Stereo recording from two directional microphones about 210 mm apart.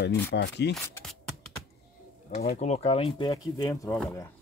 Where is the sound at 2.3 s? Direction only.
40° left (ahead or behind).